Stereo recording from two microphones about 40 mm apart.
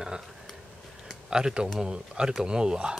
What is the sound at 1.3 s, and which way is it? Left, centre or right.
Speech, centre.